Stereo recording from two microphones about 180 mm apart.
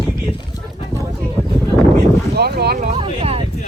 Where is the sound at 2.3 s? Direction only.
65° right (ahead or behind).